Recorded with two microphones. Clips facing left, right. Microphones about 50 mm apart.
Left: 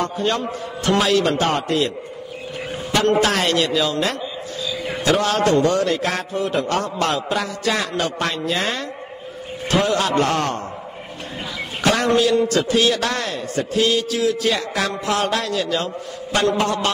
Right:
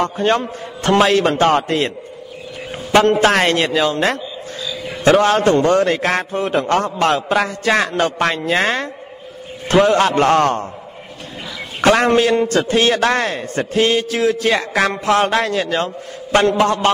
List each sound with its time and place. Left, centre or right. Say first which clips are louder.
0.0 s a man's voice: right 5 dB; right
2.9 s a man's voice: right 5 dB; right
11.8 s a man's voice: right 4 dB; right